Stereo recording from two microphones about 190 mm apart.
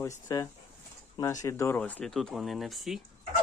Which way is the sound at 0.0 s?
15° left (ahead or behind).